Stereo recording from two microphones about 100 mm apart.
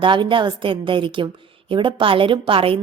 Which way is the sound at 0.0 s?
55° right (ahead or behind).